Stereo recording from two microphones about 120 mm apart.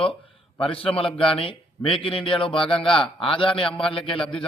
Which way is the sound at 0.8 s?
50° left (ahead or behind).